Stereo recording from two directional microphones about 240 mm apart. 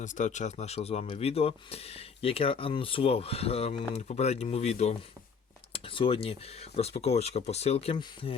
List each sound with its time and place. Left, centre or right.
0.0 s speech: left